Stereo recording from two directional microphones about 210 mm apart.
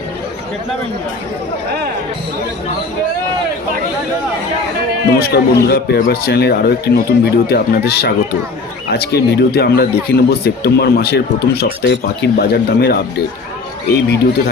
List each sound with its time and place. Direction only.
5.2 s speech: 50° left (ahead or behind)